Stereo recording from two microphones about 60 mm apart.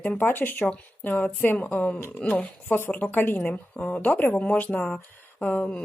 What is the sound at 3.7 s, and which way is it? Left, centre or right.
Speech, left.